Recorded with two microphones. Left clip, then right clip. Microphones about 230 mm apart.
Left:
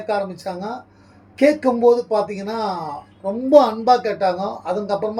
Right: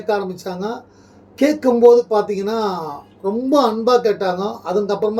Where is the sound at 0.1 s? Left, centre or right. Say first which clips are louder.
Right 2 dB; centre.